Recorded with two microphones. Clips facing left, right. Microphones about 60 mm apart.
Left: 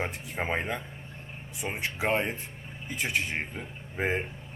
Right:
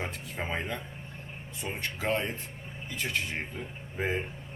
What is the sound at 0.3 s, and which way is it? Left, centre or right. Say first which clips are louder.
A man's voice: left 4 dB; left.